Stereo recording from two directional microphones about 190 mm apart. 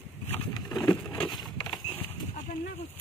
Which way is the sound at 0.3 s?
10° left (ahead or behind).